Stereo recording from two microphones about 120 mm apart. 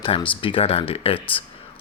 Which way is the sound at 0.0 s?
45° left (ahead or behind).